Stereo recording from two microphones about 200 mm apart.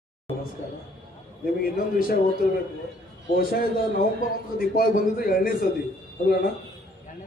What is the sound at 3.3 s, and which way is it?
A man's voice, 50° left (ahead or behind).